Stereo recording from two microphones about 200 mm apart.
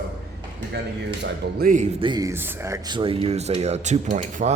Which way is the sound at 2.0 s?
20° right (ahead or behind).